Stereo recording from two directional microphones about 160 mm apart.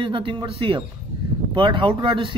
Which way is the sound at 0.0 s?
30° right (ahead or behind).